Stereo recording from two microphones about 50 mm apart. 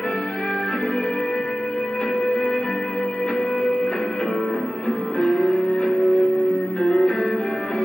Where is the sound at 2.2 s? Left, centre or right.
Centre.